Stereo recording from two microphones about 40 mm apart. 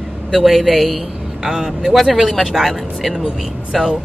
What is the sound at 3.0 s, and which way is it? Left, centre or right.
Speech, centre.